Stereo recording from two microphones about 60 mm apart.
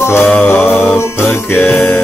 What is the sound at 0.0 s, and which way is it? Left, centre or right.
Music, left.